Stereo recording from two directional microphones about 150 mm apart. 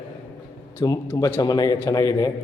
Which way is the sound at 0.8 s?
25° left (ahead or behind).